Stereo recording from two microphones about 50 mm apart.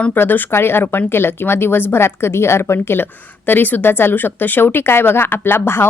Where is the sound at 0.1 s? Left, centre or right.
Left.